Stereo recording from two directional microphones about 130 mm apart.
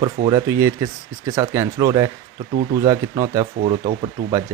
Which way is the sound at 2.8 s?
25° right (ahead or behind).